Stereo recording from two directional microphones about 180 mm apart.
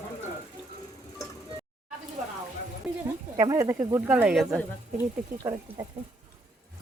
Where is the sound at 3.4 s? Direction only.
20° right (ahead or behind).